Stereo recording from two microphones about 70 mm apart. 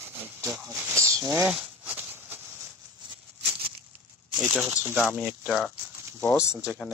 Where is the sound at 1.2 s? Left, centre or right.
Right.